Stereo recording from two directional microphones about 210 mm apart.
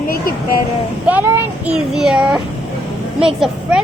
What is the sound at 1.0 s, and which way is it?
A child's voice, 5° right (ahead or behind).